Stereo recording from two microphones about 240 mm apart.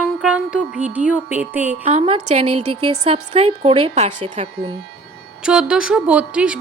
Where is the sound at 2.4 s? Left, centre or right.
Right.